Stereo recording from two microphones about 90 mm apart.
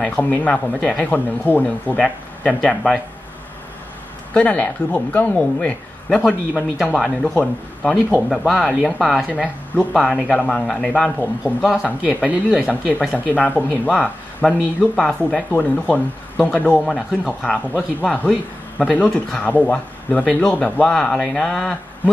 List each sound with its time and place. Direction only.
0.0 s speech: 15° left (ahead or behind)
0.7 s speech: 5° left (ahead or behind)
1.1 s speech: 20° left (ahead or behind)
2.0 s speech: 5° left (ahead or behind)
4.3 s speech: 15° left (ahead or behind)
8.3 s speech: centre (ahead or behind)
10.3 s speech: 15° left (ahead or behind)
11.6 s speech: 10° right (ahead or behind)
13.3 s speech: 20° left (ahead or behind)
13.8 s speech: 10° left (ahead or behind)
16.8 s speech: centre (ahead or behind)
17.3 s speech: 10° left (ahead or behind)